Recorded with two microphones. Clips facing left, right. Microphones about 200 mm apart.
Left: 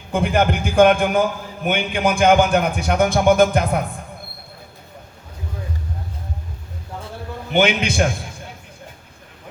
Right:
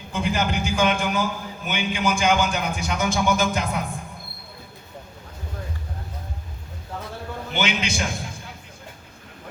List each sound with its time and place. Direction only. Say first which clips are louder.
0.1 s a man's voice: left 6 dB; 55° left (ahead or behind)
7.5 s a man's voice: left 8 dB; 55° left (ahead or behind)